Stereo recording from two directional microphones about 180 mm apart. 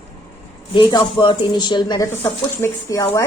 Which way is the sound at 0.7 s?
25° left (ahead or behind).